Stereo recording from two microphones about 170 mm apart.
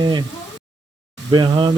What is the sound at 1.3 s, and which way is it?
Speech, 25° right (ahead or behind).